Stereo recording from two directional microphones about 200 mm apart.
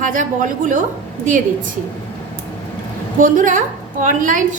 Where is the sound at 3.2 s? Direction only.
40° right (ahead or behind).